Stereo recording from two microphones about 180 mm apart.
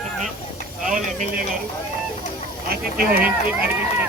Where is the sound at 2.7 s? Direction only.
55° right (ahead or behind).